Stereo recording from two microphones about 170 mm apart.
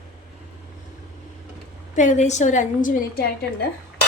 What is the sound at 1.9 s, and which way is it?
A woman's voice, 45° left (ahead or behind).